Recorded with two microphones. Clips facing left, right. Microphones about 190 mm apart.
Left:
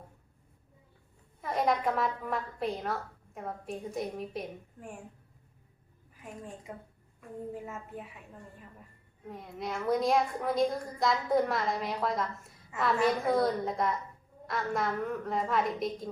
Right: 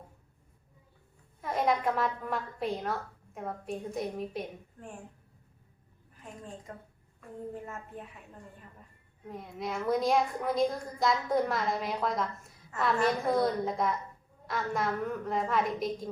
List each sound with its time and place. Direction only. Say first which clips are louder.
1.4 s a woman's voice: even; centre (ahead or behind)
6.7 s speech: left 2 dB; 10° left (ahead or behind)
9.2 s a woman's voice: right 1 dB; centre (ahead or behind)